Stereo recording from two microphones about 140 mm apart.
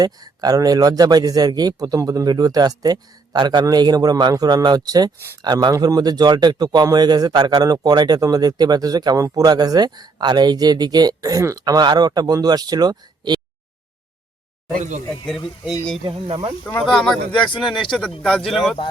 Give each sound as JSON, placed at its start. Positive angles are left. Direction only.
{"t": 0.0, "sound": "a man's voice", "side_deg": -25}
{"t": 14.8, "sound": "speech", "side_deg": -60}
{"t": 16.0, "sound": "speech", "side_deg": -40}
{"t": 16.6, "sound": "speech", "side_deg": 5}